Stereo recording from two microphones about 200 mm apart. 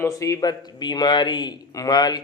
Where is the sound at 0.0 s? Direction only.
15° left (ahead or behind).